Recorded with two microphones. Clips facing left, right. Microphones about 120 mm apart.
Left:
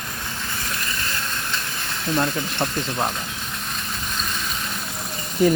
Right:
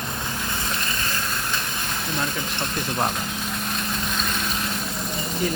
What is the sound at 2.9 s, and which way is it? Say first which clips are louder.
Speech: even; 15° right (ahead or behind).